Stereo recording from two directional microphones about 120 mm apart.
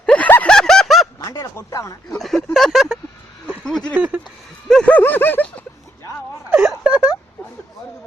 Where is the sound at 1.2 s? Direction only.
30° left (ahead or behind).